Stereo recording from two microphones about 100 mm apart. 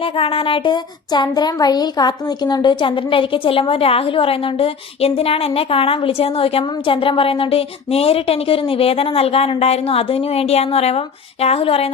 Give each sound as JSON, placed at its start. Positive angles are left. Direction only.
{"t": 0.0, "sound": "speech", "side_deg": 65}